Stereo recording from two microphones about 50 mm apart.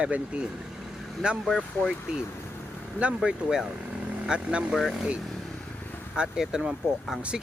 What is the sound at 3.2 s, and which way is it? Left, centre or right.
Speech, centre.